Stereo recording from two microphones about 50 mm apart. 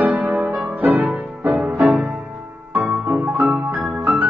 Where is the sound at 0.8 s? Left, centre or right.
Right.